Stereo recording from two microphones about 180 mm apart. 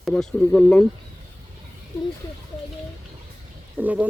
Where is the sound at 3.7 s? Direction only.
10° right (ahead or behind).